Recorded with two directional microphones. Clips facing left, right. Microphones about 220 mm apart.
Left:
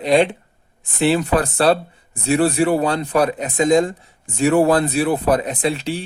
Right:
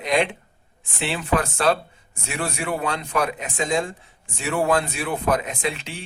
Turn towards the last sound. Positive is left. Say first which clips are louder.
# left 7 dB
turn(degrees=35)  # may be behind; listen again after turning